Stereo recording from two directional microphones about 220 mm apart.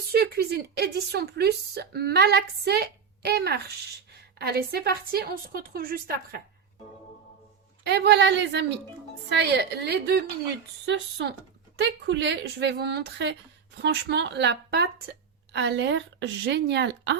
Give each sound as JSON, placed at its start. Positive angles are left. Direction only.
{"t": 0.1, "sound": "a woman's voice", "side_deg": -45}
{"t": 7.9, "sound": "a woman's voice", "side_deg": -50}